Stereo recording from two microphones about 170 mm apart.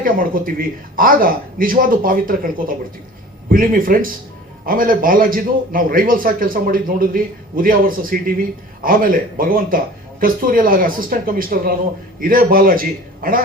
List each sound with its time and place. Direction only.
0.0 s a man's voice: 55° right (ahead or behind)